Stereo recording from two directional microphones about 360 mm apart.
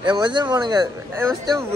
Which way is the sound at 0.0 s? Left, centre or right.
Centre.